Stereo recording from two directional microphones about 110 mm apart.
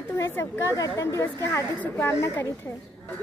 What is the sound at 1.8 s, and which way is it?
Speech, 20° left (ahead or behind).